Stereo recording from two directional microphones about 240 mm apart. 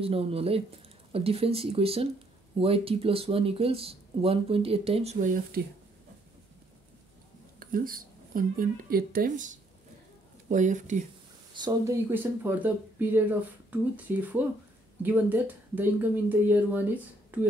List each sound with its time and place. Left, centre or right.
0.0 s speech: right
7.5 s speech: right
11.5 s speech: centre